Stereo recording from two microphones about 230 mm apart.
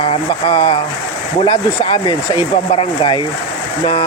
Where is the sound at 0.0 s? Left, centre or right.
Centre.